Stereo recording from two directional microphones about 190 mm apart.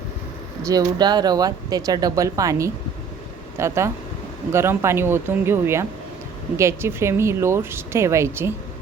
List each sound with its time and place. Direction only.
0.7 s speech: 20° right (ahead or behind)